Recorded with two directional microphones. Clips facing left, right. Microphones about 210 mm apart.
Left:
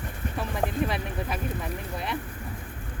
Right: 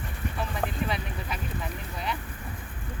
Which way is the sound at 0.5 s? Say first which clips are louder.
Left 5 dB; 50° left (ahead or behind).